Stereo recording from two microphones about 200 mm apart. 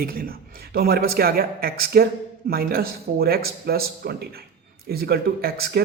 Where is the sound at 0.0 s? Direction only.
45° right (ahead or behind).